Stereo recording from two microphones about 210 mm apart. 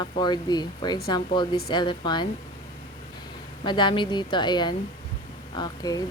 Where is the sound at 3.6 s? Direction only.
20° left (ahead or behind).